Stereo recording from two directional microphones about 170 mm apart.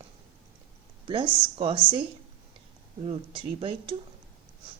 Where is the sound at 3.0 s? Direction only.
30° right (ahead or behind).